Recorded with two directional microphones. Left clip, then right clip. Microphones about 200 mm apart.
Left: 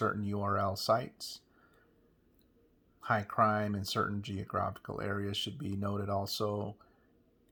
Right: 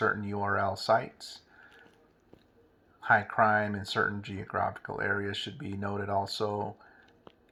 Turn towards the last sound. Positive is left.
turn(degrees=35)  # may be behind; listen again after turning